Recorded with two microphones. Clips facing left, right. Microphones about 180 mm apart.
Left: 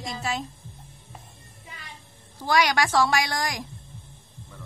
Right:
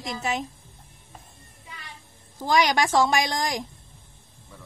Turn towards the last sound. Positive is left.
turn(degrees=-20)  # may be behind; listen again after turning